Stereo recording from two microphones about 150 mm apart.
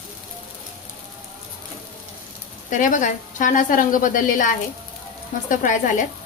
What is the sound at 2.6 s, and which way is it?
A woman's voice, 60° left (ahead or behind).